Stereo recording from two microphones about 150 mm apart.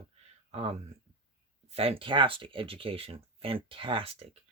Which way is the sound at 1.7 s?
40° right (ahead or behind).